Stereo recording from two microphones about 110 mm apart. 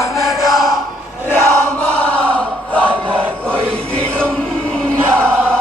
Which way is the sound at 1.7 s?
10° left (ahead or behind).